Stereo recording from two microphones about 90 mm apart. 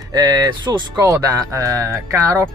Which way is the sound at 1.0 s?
40° right (ahead or behind).